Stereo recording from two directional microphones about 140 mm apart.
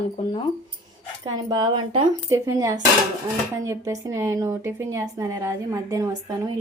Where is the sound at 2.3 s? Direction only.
20° right (ahead or behind).